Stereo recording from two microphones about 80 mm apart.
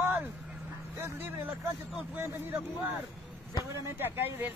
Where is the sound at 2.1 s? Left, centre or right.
Right.